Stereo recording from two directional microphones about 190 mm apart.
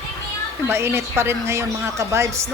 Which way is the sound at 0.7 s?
15° right (ahead or behind).